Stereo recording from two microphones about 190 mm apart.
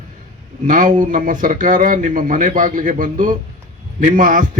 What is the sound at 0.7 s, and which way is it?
A man's voice, 45° right (ahead or behind).